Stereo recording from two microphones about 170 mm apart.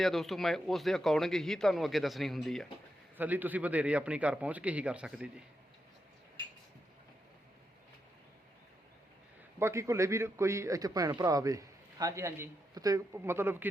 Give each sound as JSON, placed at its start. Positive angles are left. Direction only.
{"t": 0.0, "sound": "speech", "side_deg": 0}
{"t": 3.2, "sound": "a man's voice", "side_deg": -10}
{"t": 9.6, "sound": "a man's voice", "side_deg": -15}